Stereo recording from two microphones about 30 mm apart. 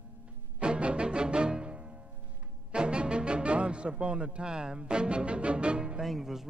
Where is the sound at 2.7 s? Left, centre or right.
Right.